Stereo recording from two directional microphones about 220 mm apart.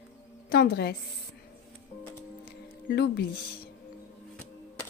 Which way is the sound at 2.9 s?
45° left (ahead or behind).